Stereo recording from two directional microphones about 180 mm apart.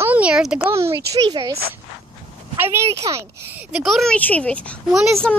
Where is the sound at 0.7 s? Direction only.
15° right (ahead or behind).